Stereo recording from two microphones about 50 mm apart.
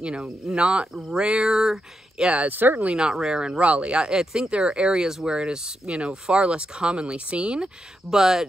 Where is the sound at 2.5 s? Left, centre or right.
Right.